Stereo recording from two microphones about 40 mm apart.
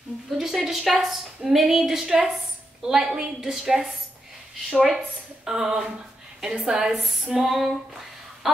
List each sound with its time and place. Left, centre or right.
0.3 s a sound: centre
0.7 s a woman's voice: centre
7.0 s female singing: centre